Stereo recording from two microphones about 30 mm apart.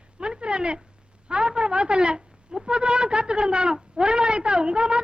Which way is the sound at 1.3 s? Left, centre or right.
Right.